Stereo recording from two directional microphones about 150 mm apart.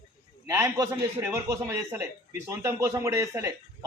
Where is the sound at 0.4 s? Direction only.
20° right (ahead or behind).